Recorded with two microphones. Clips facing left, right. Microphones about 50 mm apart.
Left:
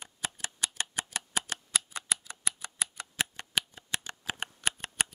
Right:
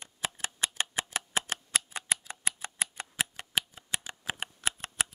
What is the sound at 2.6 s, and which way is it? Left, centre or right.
Tick, right.